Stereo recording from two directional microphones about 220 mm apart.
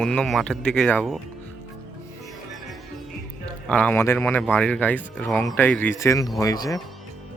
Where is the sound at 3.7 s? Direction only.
5° left (ahead or behind).